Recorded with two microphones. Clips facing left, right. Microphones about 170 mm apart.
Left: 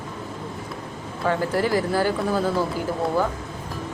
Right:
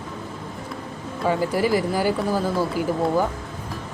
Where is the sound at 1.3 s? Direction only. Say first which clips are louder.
Right 1 dB; 10° right (ahead or behind).